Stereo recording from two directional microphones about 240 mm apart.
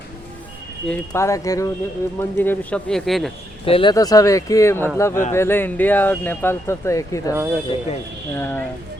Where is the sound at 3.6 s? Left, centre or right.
Left.